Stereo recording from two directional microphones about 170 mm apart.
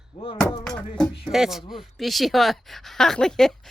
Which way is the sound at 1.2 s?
5° right (ahead or behind).